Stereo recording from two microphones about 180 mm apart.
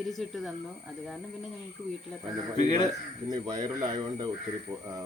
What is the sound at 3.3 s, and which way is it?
Speech, 25° right (ahead or behind).